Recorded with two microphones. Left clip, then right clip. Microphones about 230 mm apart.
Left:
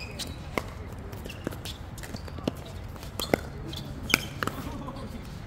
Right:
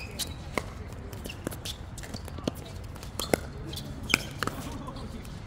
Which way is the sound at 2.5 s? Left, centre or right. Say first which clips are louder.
Left 1 dB; centre.